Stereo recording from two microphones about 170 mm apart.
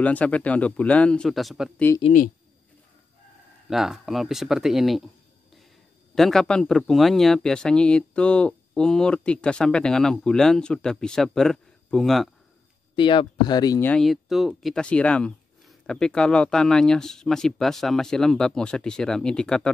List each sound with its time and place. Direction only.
0.0 s speech: 10° left (ahead or behind)
3.7 s speech: centre (ahead or behind)
6.1 s speech: centre (ahead or behind)
12.9 s speech: 30° left (ahead or behind)
13.7 s speech: 5° left (ahead or behind)